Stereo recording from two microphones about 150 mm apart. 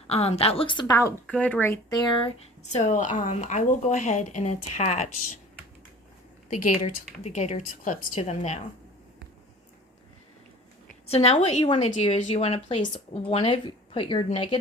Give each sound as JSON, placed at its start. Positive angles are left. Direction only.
{"t": 0.1, "sound": "speech", "side_deg": 45}
{"t": 1.3, "sound": "speech", "side_deg": 10}
{"t": 2.2, "sound": "speech", "side_deg": 50}
{"t": 6.5, "sound": "speech", "side_deg": 60}
{"t": 7.2, "sound": "speech", "side_deg": 45}
{"t": 11.0, "sound": "a woman's voice", "side_deg": 45}
{"t": 11.6, "sound": "speech", "side_deg": 35}
{"t": 12.0, "sound": "speech", "side_deg": 45}